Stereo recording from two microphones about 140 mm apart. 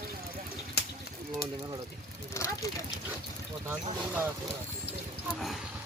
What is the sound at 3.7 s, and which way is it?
Speech, 15° right (ahead or behind).